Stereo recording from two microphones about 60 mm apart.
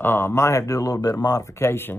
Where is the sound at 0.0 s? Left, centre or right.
Left.